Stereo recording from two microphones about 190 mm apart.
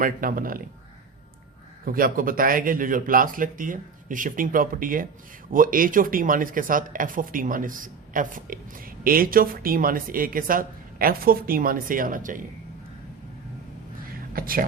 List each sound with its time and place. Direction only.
0.0 s speech: 45° right (ahead or behind)
1.8 s speech: 50° right (ahead or behind)
14.3 s speech: 50° right (ahead or behind)